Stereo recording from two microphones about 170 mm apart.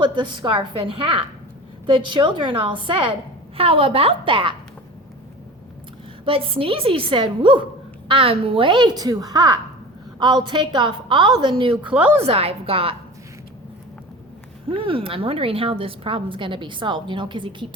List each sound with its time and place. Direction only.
0.1 s a woman's voice: 25° right (ahead or behind)
6.2 s a woman's voice: 35° right (ahead or behind)
11.9 s a woman's voice: 10° right (ahead or behind)
12.2 s a woman's voice: 35° right (ahead or behind)
14.7 s a woman's voice: 30° right (ahead or behind)